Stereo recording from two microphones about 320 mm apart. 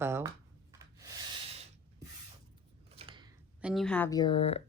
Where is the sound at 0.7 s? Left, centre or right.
Centre.